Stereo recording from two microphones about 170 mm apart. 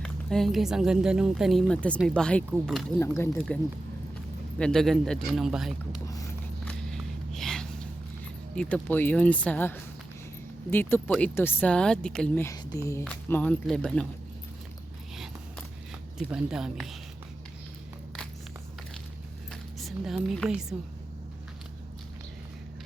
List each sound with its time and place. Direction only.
0.0 s speech: 5° left (ahead or behind)
3.0 s speech: 15° left (ahead or behind)
4.5 s speech: 5° left (ahead or behind)
6.1 s a sound: 20° left (ahead or behind)
6.7 s walk: 5° left (ahead or behind)
8.5 s speech: 10° left (ahead or behind)
15.1 s a sound: centre (ahead or behind)
16.1 s speech: 5° right (ahead or behind)
19.8 s speech: centre (ahead or behind)